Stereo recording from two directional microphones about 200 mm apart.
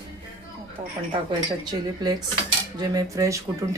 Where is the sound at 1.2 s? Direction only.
20° right (ahead or behind).